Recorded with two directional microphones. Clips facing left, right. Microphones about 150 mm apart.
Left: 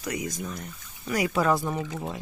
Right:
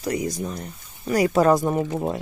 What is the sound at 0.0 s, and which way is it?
Speech, 35° right (ahead or behind).